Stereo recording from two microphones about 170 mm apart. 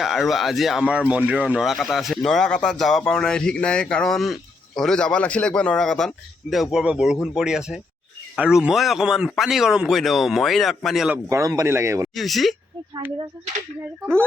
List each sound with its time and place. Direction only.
0.0 s speech: centre (ahead or behind)
11.3 s speech: 20° right (ahead or behind)
12.1 s speech: centre (ahead or behind)